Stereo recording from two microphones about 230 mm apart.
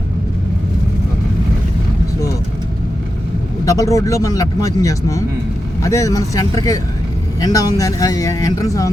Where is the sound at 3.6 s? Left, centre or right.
Centre.